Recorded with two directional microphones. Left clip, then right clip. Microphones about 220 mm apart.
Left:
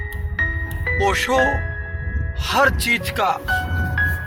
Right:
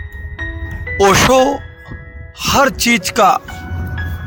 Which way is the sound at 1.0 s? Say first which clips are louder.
Right 9 dB; 40° right (ahead or behind).